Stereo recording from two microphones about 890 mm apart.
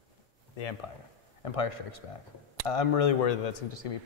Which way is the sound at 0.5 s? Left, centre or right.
Left.